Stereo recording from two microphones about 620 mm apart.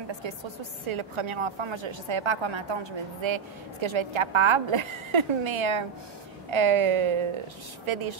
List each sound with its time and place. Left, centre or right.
0.2 s a woman's voice: right